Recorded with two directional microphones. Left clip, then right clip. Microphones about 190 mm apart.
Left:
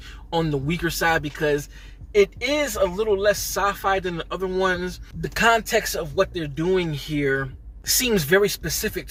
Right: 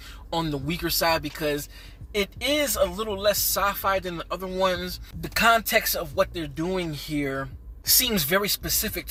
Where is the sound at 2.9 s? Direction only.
25° right (ahead or behind).